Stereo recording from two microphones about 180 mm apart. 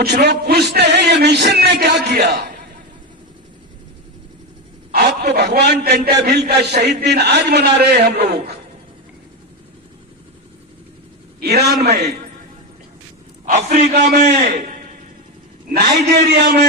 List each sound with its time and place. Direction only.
0.0 s music: 65° right (ahead or behind)
4.9 s a man's voice: 55° right (ahead or behind)
11.3 s a man's voice: 65° right (ahead or behind)
13.4 s a man's voice: 40° right (ahead or behind)
15.7 s a man's voice: 65° right (ahead or behind)